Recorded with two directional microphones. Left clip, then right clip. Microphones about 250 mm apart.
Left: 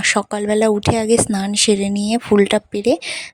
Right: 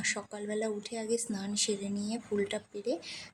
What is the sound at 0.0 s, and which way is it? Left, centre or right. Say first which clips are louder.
Speech: left 17 dB; left.